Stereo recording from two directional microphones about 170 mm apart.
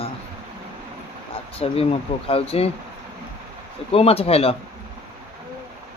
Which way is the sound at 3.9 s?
35° left (ahead or behind).